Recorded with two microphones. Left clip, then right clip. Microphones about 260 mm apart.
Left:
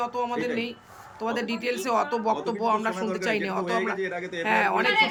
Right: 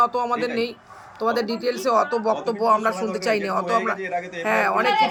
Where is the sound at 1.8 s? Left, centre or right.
Centre.